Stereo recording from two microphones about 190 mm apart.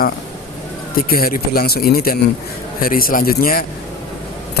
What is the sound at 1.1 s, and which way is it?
Speech, 50° left (ahead or behind).